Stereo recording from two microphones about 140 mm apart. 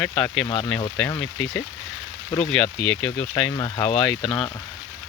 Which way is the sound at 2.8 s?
5° left (ahead or behind).